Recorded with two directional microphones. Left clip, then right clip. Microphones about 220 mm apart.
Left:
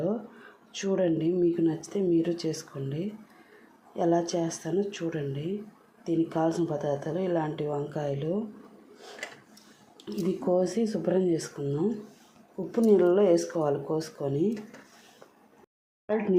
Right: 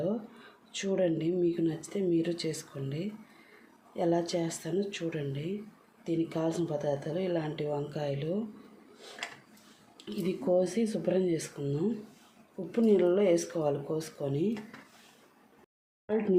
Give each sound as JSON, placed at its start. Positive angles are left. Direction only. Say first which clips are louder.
{"t": 0.8, "sound": "speech", "louder": "left 3 dB", "side_deg": 0}
{"t": 2.4, "sound": "speech", "louder": "left 3 dB", "side_deg": -30}
{"t": 2.7, "sound": "speech", "louder": "left 3 dB", "side_deg": 0}
{"t": 10.1, "sound": "speech", "louder": "left 2 dB", "side_deg": 5}
{"t": 16.0, "sound": "speech", "louder": "left 2 dB", "side_deg": 0}